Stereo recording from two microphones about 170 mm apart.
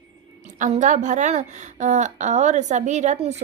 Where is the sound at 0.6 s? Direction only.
45° right (ahead or behind).